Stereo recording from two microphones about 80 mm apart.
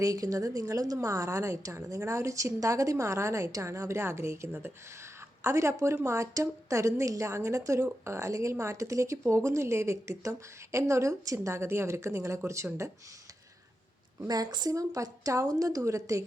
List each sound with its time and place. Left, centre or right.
0.0 s a woman's voice: right
14.3 s speech: right
14.7 s a woman's voice: right